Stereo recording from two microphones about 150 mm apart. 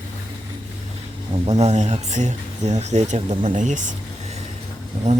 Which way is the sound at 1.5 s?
45° right (ahead or behind).